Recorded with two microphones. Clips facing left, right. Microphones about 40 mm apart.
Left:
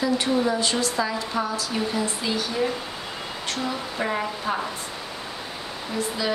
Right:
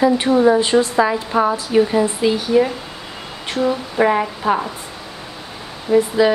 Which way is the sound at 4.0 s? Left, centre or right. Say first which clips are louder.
Right 11 dB; right.